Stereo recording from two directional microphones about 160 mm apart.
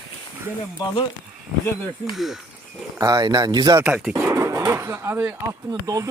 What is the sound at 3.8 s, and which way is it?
Speech, 5° right (ahead or behind).